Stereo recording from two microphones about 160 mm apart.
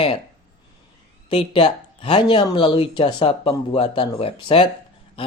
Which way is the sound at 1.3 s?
35° left (ahead or behind).